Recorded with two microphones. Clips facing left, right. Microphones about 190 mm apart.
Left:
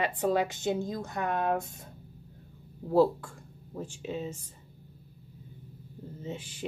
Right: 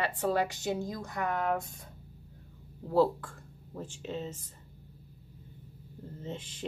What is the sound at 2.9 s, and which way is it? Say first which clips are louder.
Speech: left 2 dB; 10° left (ahead or behind).